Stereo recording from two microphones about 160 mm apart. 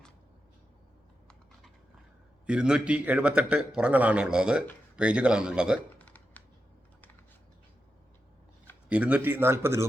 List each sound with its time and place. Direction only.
2.5 s a man's voice: 5° right (ahead or behind)
6.0 s computer keyboard: 10° left (ahead or behind)
8.9 s a man's voice: 10° right (ahead or behind)